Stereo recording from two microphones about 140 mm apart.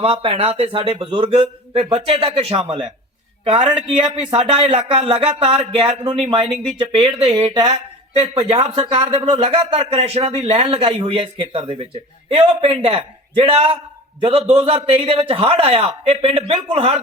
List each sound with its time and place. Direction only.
0.0 s speech: 40° right (ahead or behind)